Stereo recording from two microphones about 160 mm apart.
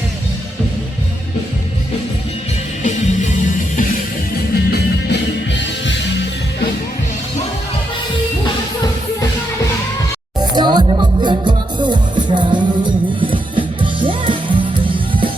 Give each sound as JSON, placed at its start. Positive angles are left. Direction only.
{"t": 2.8, "sound": "music", "side_deg": 50}
{"t": 4.5, "sound": "music", "side_deg": 85}
{"t": 10.4, "sound": "music", "side_deg": -25}